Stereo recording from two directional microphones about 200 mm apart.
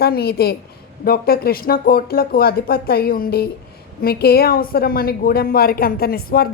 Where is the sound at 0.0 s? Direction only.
50° left (ahead or behind).